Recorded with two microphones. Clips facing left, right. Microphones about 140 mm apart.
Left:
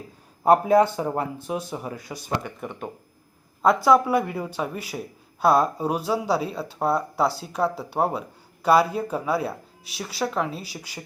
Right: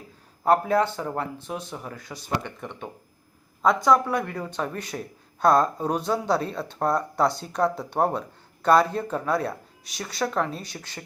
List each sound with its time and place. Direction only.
0.4 s a man's voice: 15° left (ahead or behind)